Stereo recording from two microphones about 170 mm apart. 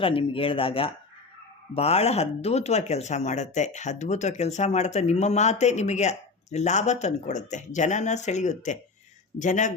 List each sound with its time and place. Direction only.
0.0 s speech: 30° left (ahead or behind)